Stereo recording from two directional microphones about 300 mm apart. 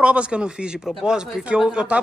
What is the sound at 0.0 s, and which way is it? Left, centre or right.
Speech, centre.